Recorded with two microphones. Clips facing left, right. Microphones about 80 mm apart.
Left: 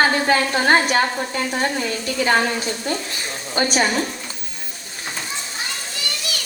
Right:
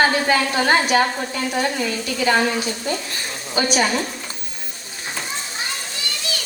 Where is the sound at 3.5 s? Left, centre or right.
Left.